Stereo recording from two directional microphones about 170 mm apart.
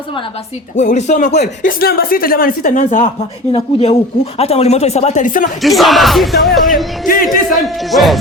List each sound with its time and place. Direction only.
0.8 s speech: 45° left (ahead or behind)
1.6 s speech: 65° left (ahead or behind)
3.5 s speech: 35° left (ahead or behind); by 5.5 s 50° left (ahead or behind)
5.6 s speech: centre (ahead or behind)
7.0 s speech: 55° left (ahead or behind)
7.9 s speech: centre (ahead or behind)